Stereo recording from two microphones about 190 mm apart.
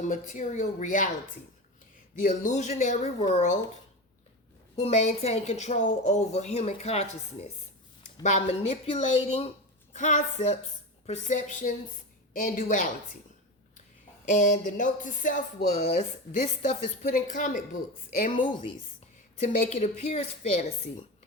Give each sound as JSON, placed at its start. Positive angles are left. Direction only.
{"t": 0.0, "sound": "speech", "side_deg": 40}
{"t": 2.2, "sound": "speech", "side_deg": 40}
{"t": 4.8, "sound": "speech", "side_deg": 35}
{"t": 14.3, "sound": "speech", "side_deg": 40}
{"t": 18.2, "sound": "speech", "side_deg": 30}
{"t": 19.7, "sound": "speech", "side_deg": 35}